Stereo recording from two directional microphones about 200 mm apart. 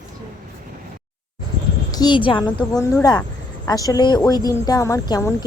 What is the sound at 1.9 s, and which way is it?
Speech, 20° left (ahead or behind).